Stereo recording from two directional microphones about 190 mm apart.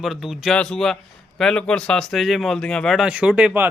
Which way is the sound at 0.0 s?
Centre (ahead or behind).